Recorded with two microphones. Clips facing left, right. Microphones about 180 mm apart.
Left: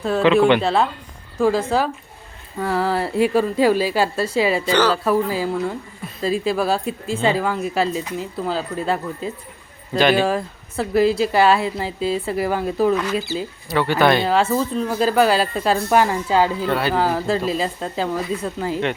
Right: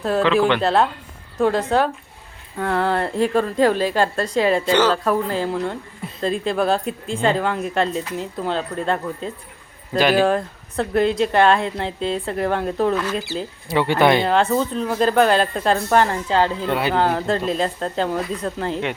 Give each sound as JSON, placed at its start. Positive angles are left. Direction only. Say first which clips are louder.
{"t": 0.6, "sound": "speech", "louder": "right 1 dB", "side_deg": 0}
{"t": 13.7, "sound": "speech", "louder": "right 1 dB", "side_deg": -25}
{"t": 14.5, "sound": "speech", "louder": "even", "side_deg": 0}
{"t": 16.6, "sound": "speech", "louder": "left 1 dB", "side_deg": -20}
{"t": 16.9, "sound": "speech", "louder": "even", "side_deg": 5}